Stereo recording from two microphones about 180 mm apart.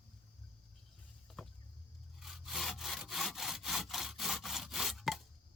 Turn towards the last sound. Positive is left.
turn(degrees=0)  # may be behind; listen again after turning